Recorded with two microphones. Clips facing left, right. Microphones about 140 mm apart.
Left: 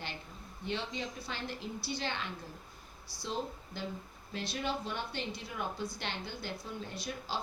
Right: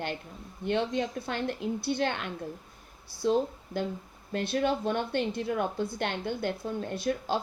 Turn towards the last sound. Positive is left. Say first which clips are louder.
# right 10 dB
turn(degrees=-55)  # may be behind; listen again after turning